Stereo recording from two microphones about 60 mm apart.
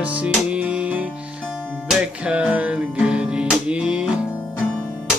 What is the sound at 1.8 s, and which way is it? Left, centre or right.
Music, centre.